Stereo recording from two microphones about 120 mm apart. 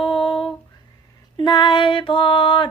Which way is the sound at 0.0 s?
45° left (ahead or behind).